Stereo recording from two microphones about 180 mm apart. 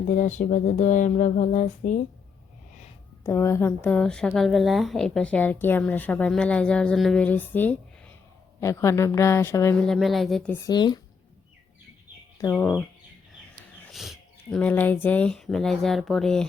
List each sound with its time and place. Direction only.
0.1 s speech: 45° left (ahead or behind)
3.2 s a woman's voice: 15° left (ahead or behind)
9.8 s speech: centre (ahead or behind)
10.7 s speech: 25° left (ahead or behind)
12.5 s speech: 5° right (ahead or behind)
13.9 s speech: centre (ahead or behind)